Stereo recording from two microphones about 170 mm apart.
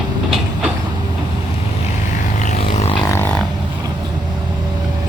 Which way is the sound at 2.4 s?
45° left (ahead or behind).